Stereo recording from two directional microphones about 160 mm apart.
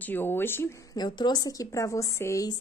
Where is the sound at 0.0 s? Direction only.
10° left (ahead or behind).